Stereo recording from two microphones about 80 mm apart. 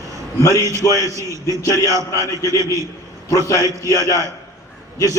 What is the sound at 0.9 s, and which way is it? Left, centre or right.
A man's voice, left.